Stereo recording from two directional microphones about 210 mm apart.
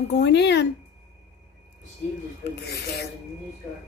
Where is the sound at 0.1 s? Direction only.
55° left (ahead or behind).